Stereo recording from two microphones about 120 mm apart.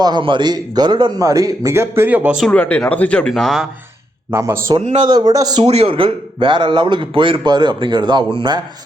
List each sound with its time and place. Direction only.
0.0 s a man's voice: 40° right (ahead or behind); by 2.4 s 10° right (ahead or behind)
2.5 s speech: 10° left (ahead or behind)
4.3 s a man's voice: 20° right (ahead or behind)
5.0 s speech: 35° right (ahead or behind)
5.5 s speech: 60° right (ahead or behind); by 8.6 s 45° right (ahead or behind)